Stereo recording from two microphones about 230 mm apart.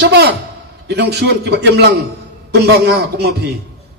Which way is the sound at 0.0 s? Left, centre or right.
Right.